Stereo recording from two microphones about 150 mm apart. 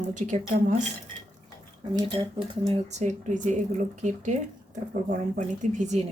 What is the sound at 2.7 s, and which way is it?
Speech, 50° right (ahead or behind).